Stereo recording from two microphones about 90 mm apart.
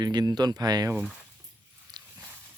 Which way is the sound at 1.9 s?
50° right (ahead or behind).